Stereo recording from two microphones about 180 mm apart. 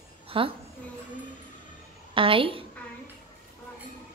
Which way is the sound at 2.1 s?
30° right (ahead or behind).